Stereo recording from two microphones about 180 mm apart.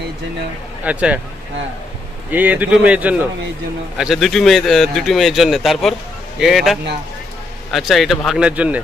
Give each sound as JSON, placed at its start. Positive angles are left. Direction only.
{"t": 0.9, "sound": "speech", "side_deg": -5}
{"t": 2.3, "sound": "a man's voice", "side_deg": -10}